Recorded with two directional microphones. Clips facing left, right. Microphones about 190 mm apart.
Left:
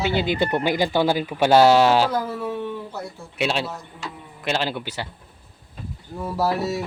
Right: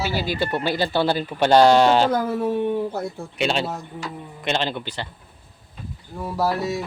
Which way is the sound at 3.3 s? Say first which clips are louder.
Even; 5° left (ahead or behind).